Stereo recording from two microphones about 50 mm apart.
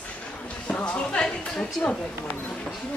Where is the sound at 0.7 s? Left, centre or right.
Left.